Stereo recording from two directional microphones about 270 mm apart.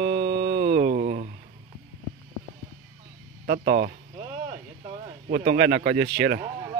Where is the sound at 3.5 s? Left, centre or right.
Right.